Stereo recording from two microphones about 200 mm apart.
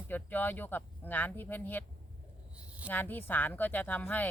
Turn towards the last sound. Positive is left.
turn(degrees=10)  # may be behind; listen again after turning